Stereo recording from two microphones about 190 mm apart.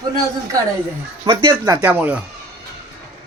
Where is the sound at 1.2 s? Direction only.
25° right (ahead or behind).